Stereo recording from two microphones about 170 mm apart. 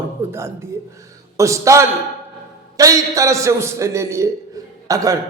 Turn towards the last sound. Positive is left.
turn(degrees=-20)  # may be behind; listen again after turning